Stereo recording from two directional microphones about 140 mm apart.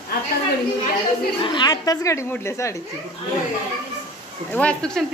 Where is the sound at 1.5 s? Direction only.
30° left (ahead or behind).